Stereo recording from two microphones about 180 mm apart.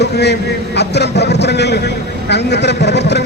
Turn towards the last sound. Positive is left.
turn(degrees=70)  # may be behind; listen again after turning